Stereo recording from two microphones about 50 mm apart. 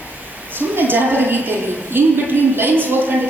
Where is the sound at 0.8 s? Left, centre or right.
Right.